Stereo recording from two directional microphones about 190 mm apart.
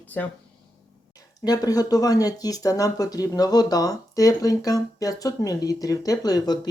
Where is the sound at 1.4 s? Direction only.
20° left (ahead or behind).